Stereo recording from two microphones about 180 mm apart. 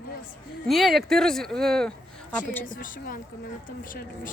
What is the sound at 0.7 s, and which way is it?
Speech, centre (ahead or behind).